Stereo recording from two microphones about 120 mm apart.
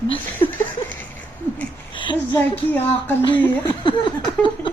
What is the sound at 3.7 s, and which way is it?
Speech, 40° left (ahead or behind).